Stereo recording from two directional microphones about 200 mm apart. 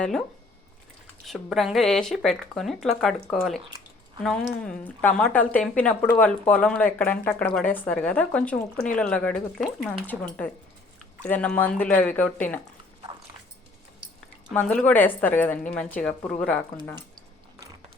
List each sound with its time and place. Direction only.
0.0 s speech: centre (ahead or behind)
1.3 s a woman's voice: centre (ahead or behind)
14.5 s a woman's voice: 5° left (ahead or behind)